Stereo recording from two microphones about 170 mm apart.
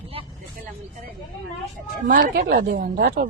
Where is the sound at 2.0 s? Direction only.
50° right (ahead or behind).